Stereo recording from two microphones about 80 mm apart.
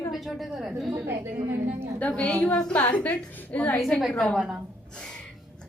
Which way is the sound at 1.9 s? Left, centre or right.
Centre.